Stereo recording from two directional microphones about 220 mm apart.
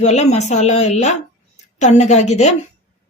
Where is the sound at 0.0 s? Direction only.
30° left (ahead or behind).